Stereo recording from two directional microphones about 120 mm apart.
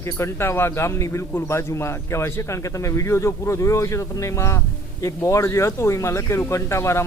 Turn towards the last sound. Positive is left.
turn(degrees=25)  # may be behind; listen again after turning